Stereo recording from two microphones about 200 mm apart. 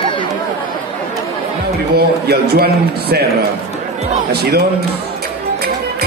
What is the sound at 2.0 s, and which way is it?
A man's voice, 50° right (ahead or behind).